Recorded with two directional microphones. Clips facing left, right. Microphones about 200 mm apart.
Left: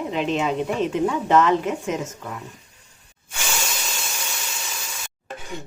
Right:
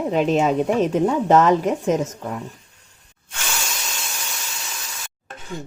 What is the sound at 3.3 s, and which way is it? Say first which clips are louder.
Hiss: left 1 dB; 5° left (ahead or behind).